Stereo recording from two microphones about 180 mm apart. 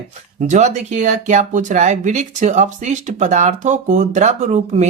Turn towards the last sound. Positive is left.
turn(degrees=-40)  # may be behind; listen again after turning